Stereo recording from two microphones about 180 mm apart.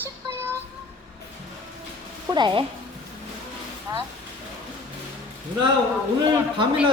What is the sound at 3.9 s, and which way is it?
Speech, 15° right (ahead or behind).